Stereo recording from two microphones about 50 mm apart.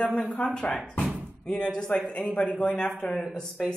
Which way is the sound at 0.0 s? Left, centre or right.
Left.